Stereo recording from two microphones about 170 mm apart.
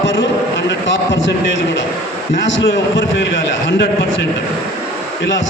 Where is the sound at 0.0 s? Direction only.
90° left.